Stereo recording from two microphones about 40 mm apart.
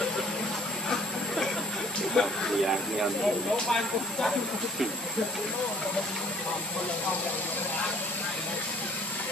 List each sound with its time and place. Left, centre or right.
0.8 s a sound: centre
2.2 s speech: centre
2.6 s speech: centre
3.6 s speech: centre